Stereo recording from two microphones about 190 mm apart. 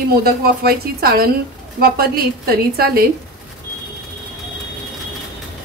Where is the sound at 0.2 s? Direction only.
50° right (ahead or behind).